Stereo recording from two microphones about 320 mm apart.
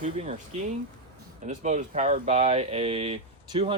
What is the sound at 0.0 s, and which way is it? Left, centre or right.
Speech, centre.